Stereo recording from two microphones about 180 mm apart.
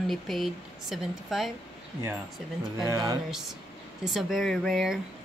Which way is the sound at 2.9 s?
20° right (ahead or behind).